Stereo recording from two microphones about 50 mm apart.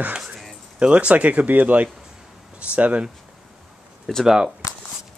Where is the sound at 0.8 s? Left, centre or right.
Right.